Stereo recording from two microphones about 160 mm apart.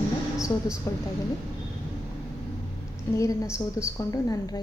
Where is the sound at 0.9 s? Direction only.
20° left (ahead or behind).